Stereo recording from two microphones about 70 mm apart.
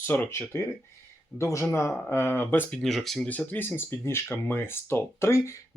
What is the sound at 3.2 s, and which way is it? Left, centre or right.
Speech, left.